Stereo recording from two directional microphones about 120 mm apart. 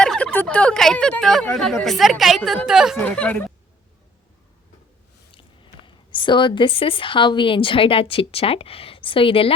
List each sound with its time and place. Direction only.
0.0 s a sound: 10° left (ahead or behind)
0.4 s speech: 10° left (ahead or behind)
3.0 s speech: 10° left (ahead or behind)
5.3 s speech: 45° left (ahead or behind)